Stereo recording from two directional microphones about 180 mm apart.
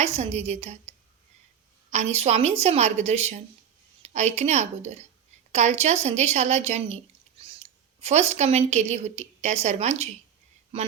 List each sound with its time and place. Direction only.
0.0 s a woman's voice: 35° right (ahead or behind)